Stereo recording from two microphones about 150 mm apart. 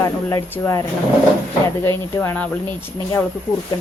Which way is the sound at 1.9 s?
15° left (ahead or behind).